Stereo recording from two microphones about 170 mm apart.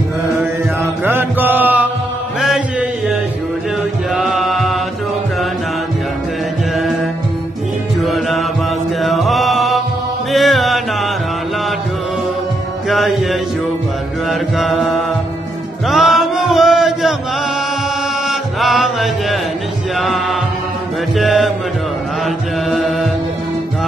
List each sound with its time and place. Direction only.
1.0 s music: 10° right (ahead or behind)
2.4 s mantra: 5° right (ahead or behind)
4.1 s chant: centre (ahead or behind)
8.0 s music: centre (ahead or behind)
12.8 s music: centre (ahead or behind)
14.3 s mantra: centre (ahead or behind)
15.9 s chant: centre (ahead or behind)
18.3 s music: centre (ahead or behind)
22.2 s chant: centre (ahead or behind)